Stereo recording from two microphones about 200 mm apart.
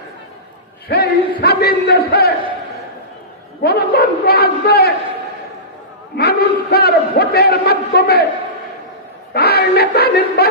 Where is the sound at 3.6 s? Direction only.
50° left (ahead or behind).